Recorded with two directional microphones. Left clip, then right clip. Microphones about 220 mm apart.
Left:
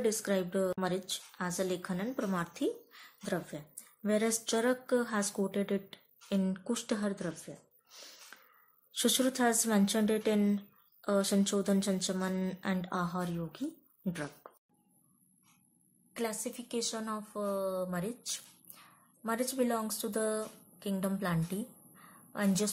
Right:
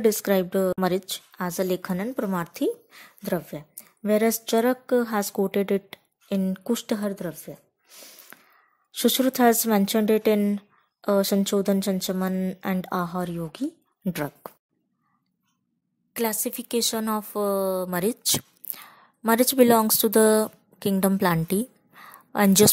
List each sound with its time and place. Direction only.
0.0 s a woman's voice: 35° right (ahead or behind)
16.1 s speech: 45° right (ahead or behind)